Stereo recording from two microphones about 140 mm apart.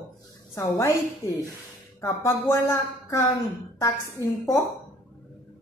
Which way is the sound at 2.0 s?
20° left (ahead or behind).